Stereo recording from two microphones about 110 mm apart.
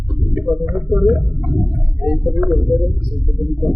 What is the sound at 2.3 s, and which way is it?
Speech, 20° right (ahead or behind).